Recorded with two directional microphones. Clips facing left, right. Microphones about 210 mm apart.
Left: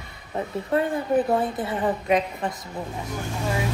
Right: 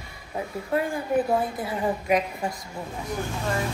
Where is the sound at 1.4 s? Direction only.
25° left (ahead or behind).